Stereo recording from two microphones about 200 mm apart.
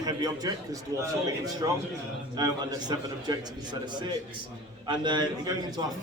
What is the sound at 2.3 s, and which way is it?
A man's voice, 20° right (ahead or behind).